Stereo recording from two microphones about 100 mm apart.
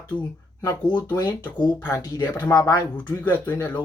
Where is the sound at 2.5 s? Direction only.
40° left (ahead or behind).